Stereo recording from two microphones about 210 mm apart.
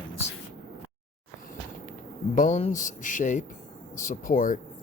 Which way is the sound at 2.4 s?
35° left (ahead or behind).